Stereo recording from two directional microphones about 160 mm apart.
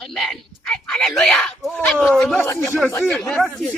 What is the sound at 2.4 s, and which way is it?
Speech, 15° left (ahead or behind).